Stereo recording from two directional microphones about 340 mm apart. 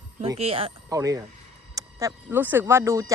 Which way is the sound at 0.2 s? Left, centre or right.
Centre.